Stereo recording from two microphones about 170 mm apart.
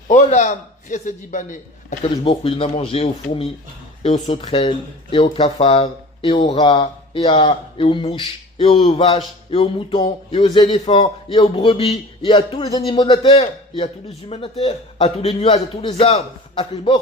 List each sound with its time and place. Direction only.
0.1 s a man's voice: 45° left (ahead or behind)
2.0 s speech: 30° left (ahead or behind)